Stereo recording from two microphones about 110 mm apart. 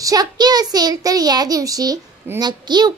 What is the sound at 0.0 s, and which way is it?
A child's voice, 35° right (ahead or behind).